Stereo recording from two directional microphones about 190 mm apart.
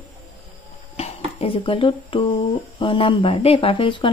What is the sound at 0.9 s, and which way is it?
Speech, 30° left (ahead or behind).